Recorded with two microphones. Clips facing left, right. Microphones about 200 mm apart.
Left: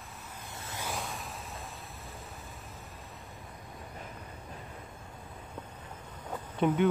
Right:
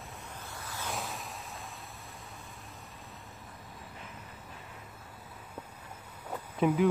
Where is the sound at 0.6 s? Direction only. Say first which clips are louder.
Left 2 dB; 25° left (ahead or behind).